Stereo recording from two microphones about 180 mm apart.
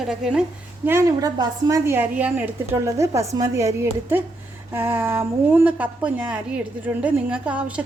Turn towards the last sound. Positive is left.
turn(degrees=-5)  # may be behind; listen again after turning